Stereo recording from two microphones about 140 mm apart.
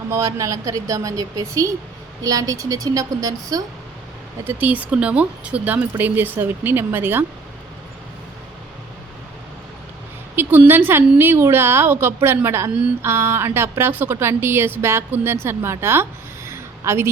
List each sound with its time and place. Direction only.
0.1 s a woman's voice: 25° right (ahead or behind)
4.4 s a woman's voice: 10° right (ahead or behind)
10.3 s a woman's voice: 15° right (ahead or behind)
16.5 s a sound: 20° right (ahead or behind)